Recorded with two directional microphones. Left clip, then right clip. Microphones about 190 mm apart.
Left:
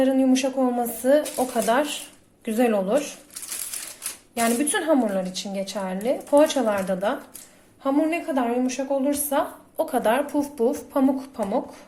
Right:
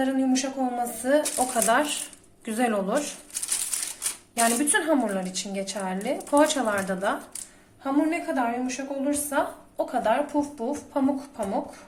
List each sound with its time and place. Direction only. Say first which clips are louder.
0.0 s a woman's voice: left 5 dB; 30° left (ahead or behind)
4.4 s a woman's voice: even; 15° left (ahead or behind)
8.3 s a woman's voice: left 3 dB; 30° left (ahead or behind)